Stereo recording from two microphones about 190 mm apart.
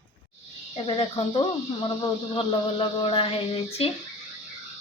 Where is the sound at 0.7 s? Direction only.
30° left (ahead or behind).